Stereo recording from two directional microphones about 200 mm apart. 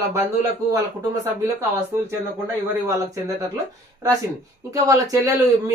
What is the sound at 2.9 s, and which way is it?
Speech, 15° right (ahead or behind).